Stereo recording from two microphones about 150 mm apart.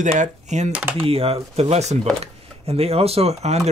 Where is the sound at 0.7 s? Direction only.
10° right (ahead or behind).